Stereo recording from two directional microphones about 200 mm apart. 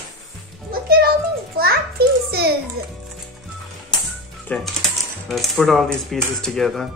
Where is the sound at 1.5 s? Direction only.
50° right (ahead or behind).